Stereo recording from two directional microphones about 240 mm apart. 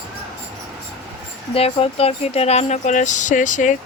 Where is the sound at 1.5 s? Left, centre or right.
Left.